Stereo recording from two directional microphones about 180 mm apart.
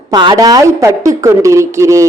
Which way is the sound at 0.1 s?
25° right (ahead or behind).